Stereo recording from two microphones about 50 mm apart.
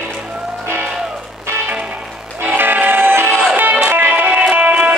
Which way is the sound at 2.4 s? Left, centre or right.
Right.